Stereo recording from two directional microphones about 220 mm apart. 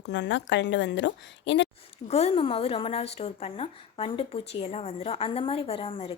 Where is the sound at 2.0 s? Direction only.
30° left (ahead or behind).